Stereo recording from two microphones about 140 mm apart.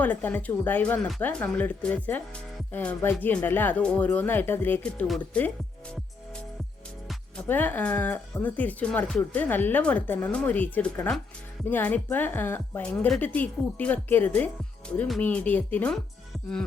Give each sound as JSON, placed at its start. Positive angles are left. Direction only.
{"t": 0.0, "sound": "speech", "side_deg": 15}
{"t": 5.0, "sound": "speech", "side_deg": 0}
{"t": 7.4, "sound": "speech", "side_deg": 10}